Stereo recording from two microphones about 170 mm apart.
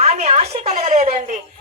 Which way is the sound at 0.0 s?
40° right (ahead or behind).